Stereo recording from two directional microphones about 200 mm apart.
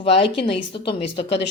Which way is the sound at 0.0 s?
30° left (ahead or behind).